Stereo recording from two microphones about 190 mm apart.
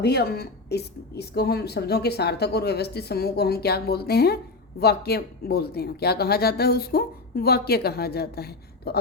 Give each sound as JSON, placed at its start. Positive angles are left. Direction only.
{"t": 0.0, "sound": "a woman's voice", "side_deg": 60}